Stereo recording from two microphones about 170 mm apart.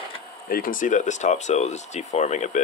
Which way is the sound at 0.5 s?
55° left (ahead or behind).